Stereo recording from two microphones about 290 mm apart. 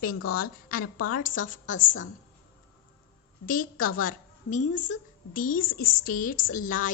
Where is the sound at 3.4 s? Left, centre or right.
Left.